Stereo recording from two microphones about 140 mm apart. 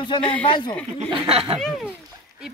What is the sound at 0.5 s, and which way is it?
Speech, 35° left (ahead or behind).